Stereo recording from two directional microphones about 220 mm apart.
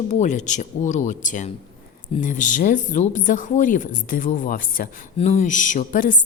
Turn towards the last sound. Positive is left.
turn(degrees=40)  # may be behind; listen again after turning